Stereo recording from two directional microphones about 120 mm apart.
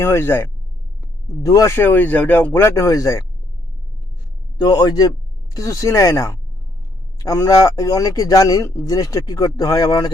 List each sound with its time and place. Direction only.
0.0 s a man's voice: 20° left (ahead or behind)
4.5 s a man's voice: 35° left (ahead or behind)